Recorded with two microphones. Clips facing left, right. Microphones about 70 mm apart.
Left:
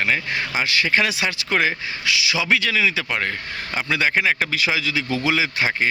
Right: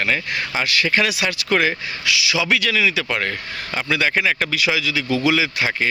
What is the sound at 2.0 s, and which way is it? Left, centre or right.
Speech, left.